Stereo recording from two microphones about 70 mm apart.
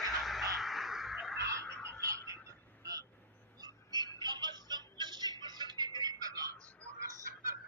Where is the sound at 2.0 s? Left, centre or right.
Right.